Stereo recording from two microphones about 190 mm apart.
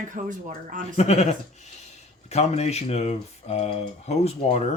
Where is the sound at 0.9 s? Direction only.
35° left (ahead or behind).